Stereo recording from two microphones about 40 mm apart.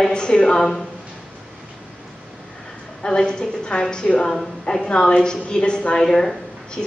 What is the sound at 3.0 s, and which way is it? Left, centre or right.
A woman's voice, left.